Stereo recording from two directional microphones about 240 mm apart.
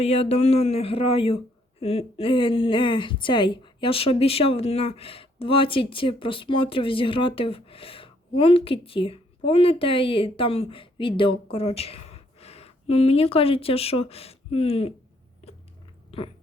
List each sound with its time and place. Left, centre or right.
0.0 s a woman's voice: left